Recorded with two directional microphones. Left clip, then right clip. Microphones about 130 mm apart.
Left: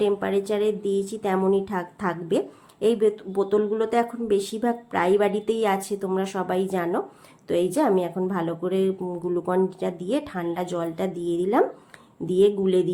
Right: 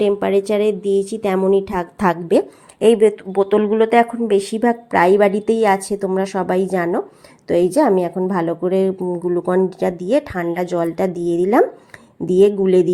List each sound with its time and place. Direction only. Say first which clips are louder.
0.0 s speech: right 7 dB; 45° right (ahead or behind)
2.8 s speech: right 8 dB; 45° right (ahead or behind)